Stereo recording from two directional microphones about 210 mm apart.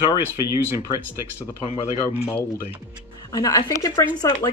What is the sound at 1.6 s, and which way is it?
Speech, 25° left (ahead or behind).